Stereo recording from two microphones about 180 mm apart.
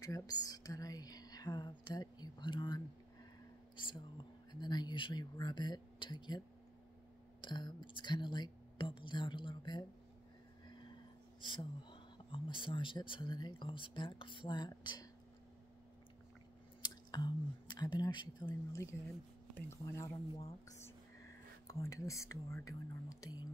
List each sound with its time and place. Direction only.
0.0 s speech: 20° left (ahead or behind)
7.4 s speech: 25° left (ahead or behind)
11.4 s speech: 25° left (ahead or behind)
16.8 s speech: 25° left (ahead or behind)